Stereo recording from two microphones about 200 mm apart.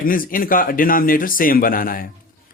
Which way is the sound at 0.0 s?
45° left (ahead or behind).